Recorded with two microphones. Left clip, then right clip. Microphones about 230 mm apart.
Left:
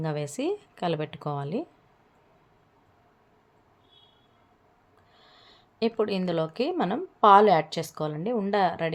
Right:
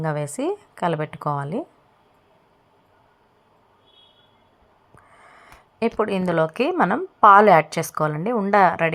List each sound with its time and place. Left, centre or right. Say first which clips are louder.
0.0 s a woman's voice: right 5 dB; centre
5.8 s a woman's voice: right 5 dB; centre
7.3 s a woman's voice: right 5 dB; centre